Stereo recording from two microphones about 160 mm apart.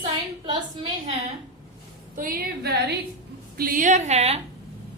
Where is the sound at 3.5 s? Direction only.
60° right (ahead or behind); by 4.4 s 40° right (ahead or behind).